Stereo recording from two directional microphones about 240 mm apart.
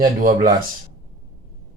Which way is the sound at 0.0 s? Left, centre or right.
Right.